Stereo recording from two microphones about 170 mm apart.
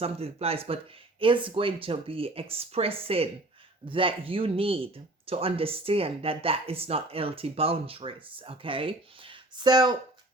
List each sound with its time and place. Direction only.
0.0 s speech: 35° right (ahead or behind)